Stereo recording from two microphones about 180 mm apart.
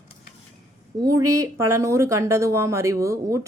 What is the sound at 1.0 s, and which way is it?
Speech, 20° right (ahead or behind).